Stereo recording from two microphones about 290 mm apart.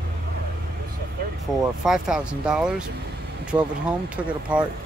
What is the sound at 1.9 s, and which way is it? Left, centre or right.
Speech, centre.